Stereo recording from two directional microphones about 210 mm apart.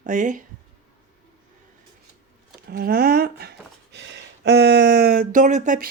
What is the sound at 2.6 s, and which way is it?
Speech, 45° right (ahead or behind).